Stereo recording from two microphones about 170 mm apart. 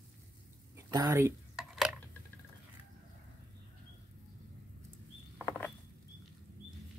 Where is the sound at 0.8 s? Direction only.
20° right (ahead or behind).